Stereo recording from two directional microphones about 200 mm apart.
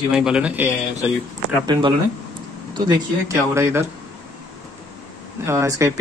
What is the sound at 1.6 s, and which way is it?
Speech, 20° right (ahead or behind).